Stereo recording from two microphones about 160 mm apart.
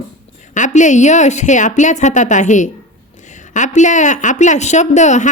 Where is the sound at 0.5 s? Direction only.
50° left (ahead or behind).